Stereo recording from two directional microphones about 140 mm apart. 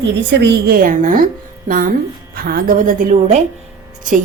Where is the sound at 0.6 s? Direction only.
85° right.